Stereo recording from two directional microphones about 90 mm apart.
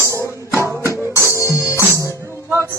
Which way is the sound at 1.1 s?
35° left (ahead or behind).